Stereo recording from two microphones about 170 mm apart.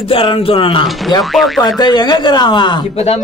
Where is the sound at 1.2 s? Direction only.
Centre (ahead or behind).